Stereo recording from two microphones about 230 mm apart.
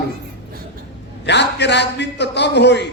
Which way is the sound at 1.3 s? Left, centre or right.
Left.